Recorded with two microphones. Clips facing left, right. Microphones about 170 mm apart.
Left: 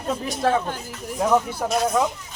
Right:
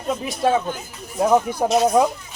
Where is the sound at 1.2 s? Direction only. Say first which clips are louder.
Right 3 dB; 20° right (ahead or behind).